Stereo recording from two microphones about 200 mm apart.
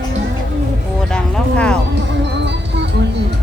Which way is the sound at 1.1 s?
5° left (ahead or behind).